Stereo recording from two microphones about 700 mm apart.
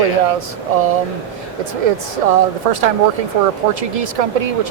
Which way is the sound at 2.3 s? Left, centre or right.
Right.